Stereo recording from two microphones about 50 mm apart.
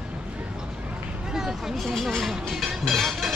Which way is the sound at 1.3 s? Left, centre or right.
Centre.